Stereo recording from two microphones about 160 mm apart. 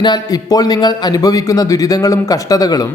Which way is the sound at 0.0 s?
25° left (ahead or behind).